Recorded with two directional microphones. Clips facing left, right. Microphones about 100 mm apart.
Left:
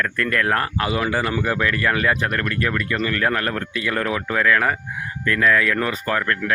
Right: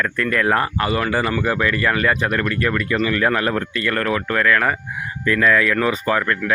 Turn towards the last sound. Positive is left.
turn(degrees=-5)  # may be behind; listen again after turning